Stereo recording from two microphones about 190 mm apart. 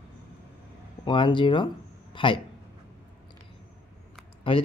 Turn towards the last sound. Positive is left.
turn(degrees=25)  # may be behind; listen again after turning